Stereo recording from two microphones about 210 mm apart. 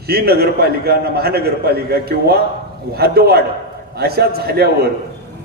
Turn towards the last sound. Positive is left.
turn(degrees=-50)  # may be behind; listen again after turning